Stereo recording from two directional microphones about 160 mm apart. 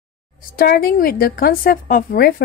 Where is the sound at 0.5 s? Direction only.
70° left (ahead or behind).